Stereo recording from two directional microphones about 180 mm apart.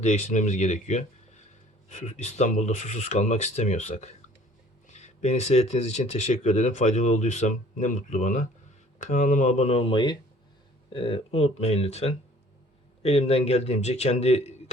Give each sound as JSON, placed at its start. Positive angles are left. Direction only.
{"t": 0.0, "sound": "speech", "side_deg": 40}